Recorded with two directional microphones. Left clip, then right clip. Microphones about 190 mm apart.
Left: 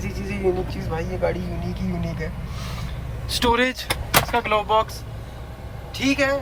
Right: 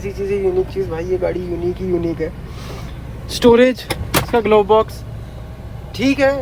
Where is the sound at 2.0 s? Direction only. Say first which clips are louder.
Right 10 dB; 10° left (ahead or behind).